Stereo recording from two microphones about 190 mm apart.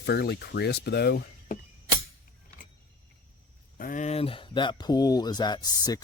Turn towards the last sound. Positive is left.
turn(degrees=20)  # may be behind; listen again after turning